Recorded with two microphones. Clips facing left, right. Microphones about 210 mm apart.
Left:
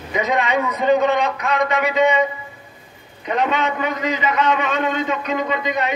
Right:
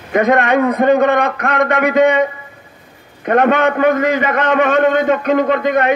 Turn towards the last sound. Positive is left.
turn(degrees=-55)  # may be behind; listen again after turning